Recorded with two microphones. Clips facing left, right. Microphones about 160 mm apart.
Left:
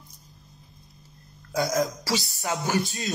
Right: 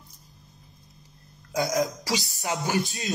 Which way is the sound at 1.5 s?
15° right (ahead or behind).